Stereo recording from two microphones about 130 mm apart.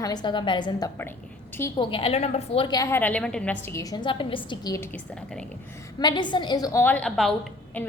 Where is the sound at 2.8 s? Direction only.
15° left (ahead or behind).